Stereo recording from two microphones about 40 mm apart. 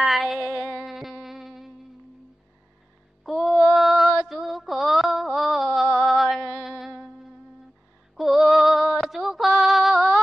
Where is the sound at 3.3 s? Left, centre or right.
Centre.